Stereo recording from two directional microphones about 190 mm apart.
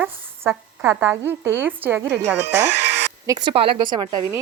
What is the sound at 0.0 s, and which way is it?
A woman's voice, 10° right (ahead or behind).